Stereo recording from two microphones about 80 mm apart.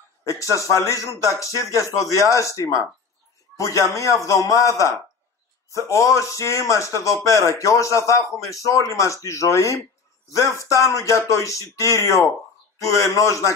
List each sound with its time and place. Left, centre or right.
0.2 s a man's voice: left